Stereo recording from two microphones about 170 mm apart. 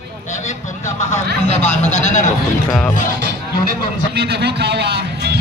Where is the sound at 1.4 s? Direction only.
40° left (ahead or behind).